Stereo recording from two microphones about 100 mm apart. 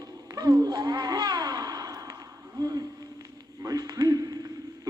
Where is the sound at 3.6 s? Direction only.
40° right (ahead or behind).